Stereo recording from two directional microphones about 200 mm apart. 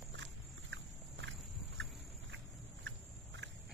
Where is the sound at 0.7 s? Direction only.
70° right (ahead or behind).